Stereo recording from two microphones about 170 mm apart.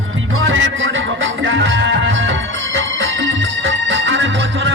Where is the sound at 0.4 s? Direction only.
90° right.